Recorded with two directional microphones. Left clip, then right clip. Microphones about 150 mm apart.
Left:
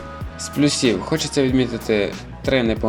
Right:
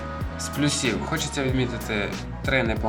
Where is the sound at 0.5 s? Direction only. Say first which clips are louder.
Left 7 dB; 30° left (ahead or behind).